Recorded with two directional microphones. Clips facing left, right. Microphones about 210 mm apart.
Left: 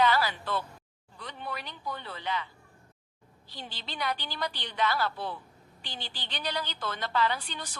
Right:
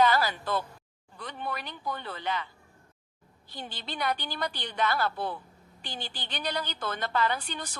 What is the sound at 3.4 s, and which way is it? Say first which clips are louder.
A woman's voice: right 3 dB; 50° right (ahead or behind).